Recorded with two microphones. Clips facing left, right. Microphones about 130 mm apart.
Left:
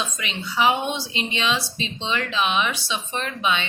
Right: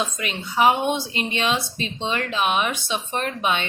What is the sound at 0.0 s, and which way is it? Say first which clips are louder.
A woman's voice: right 3 dB; 45° right (ahead or behind).